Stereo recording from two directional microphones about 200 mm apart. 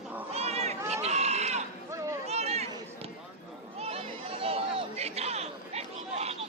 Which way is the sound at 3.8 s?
30° right (ahead or behind).